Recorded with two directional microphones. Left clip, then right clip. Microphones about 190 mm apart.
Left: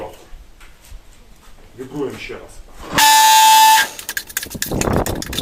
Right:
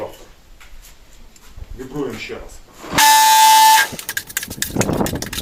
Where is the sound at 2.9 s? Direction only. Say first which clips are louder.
Left 1 dB; centre (ahead or behind).